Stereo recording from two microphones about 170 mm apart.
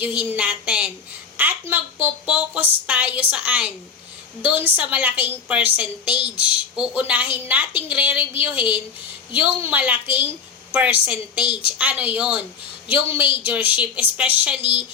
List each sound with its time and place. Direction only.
0.0 s a woman's voice: 10° right (ahead or behind)
8.3 s a woman's voice: 35° left (ahead or behind)
9.3 s a woman's voice: 10° right (ahead or behind)